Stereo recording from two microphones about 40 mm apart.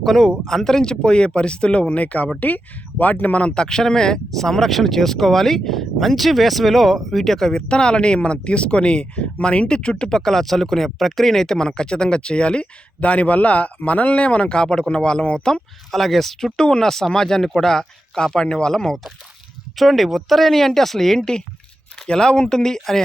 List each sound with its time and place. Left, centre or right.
0.0 s speech: centre; by 3.5 s left
3.5 s speech: centre
7.7 s speech: left
15.9 s speech: centre
19.7 s speech: centre